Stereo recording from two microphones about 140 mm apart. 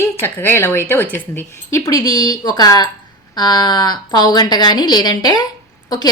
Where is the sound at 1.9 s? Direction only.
30° left (ahead or behind).